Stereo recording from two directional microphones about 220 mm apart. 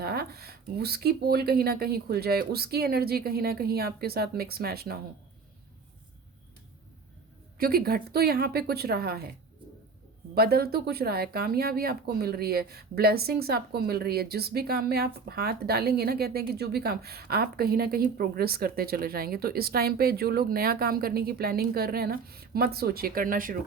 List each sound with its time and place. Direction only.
0.0 s speech: 45° right (ahead or behind)
7.6 s speech: 40° right (ahead or behind)
10.3 s speech: 45° right (ahead or behind)